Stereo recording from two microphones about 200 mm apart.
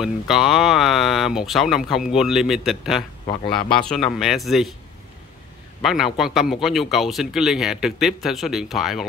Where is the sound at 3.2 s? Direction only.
25° left (ahead or behind).